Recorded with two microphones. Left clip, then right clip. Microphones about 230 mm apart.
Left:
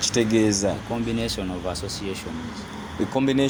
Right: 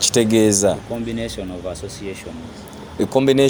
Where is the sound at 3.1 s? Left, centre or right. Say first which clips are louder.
Right 8 dB; right.